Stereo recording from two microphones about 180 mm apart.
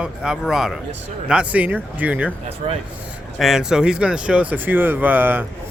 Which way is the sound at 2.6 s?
40° right (ahead or behind).